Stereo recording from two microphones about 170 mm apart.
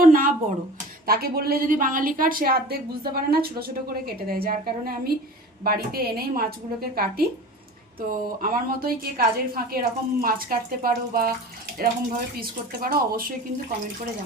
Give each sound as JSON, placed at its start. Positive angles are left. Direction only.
{"t": 0.0, "sound": "a sound", "side_deg": -55}
{"t": 1.0, "sound": "a woman's voice", "side_deg": -65}
{"t": 8.4, "sound": "a woman's voice", "side_deg": -60}